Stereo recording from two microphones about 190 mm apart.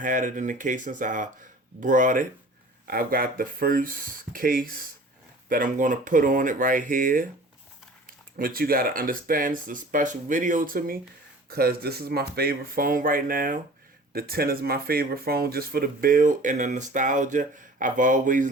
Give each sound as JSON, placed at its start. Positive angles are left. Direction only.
{"t": 0.0, "sound": "speech", "side_deg": -45}
{"t": 8.4, "sound": "speech", "side_deg": -50}